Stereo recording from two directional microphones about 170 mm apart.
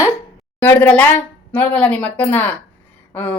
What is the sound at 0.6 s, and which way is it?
A woman's voice, 10° left (ahead or behind).